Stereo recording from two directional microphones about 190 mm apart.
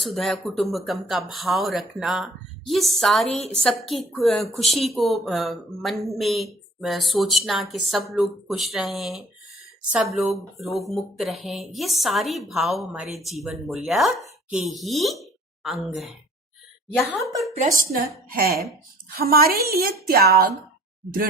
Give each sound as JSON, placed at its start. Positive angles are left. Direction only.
{"t": 0.0, "sound": "speech", "side_deg": 0}
{"t": 17.7, "sound": "a woman's voice", "side_deg": -50}